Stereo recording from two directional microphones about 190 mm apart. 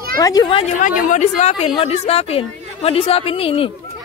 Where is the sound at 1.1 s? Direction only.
40° left (ahead or behind).